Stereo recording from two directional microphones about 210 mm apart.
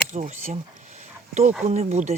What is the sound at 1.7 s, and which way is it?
Speech, 35° right (ahead or behind).